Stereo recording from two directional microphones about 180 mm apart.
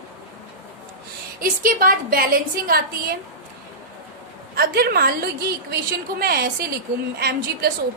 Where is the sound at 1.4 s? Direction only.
50° right (ahead or behind).